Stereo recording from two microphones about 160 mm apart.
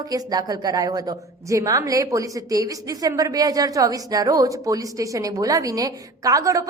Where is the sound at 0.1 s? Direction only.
25° right (ahead or behind).